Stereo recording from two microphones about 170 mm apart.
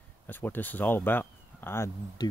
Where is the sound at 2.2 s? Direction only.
25° left (ahead or behind).